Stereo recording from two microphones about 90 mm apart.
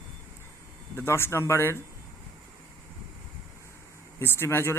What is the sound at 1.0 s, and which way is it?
Speech, 30° left (ahead or behind).